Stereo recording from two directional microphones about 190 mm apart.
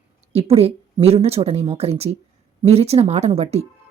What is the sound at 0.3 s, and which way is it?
A woman's voice, 30° right (ahead or behind).